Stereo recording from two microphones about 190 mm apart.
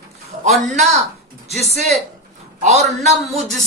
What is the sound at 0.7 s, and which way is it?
Speech, 35° right (ahead or behind).